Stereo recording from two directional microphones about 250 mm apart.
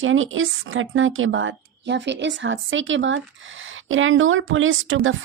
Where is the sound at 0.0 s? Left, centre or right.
Right.